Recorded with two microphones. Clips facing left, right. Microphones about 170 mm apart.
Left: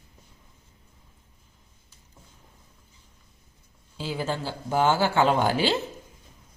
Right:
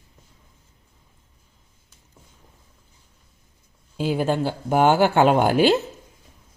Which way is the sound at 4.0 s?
55° right (ahead or behind).